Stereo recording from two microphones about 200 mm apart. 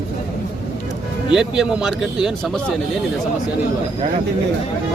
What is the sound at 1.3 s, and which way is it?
A man's voice, 5° right (ahead or behind).